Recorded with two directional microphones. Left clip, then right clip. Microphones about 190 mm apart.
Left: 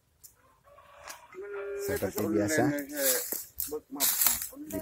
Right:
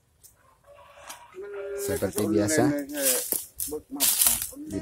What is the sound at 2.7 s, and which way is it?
Speech, 35° left (ahead or behind).